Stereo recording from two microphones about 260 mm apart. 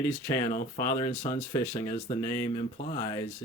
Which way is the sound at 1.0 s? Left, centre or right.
Centre.